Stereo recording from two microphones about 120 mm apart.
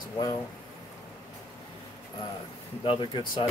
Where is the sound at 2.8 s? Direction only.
45° left (ahead or behind).